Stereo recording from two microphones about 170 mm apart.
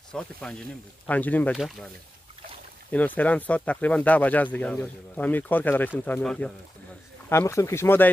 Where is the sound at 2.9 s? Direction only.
10° left (ahead or behind).